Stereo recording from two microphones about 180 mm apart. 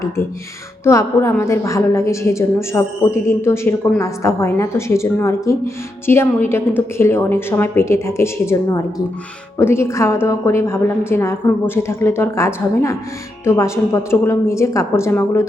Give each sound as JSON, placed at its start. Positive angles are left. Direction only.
{"t": 0.9, "sound": "a woman's voice", "side_deg": 15}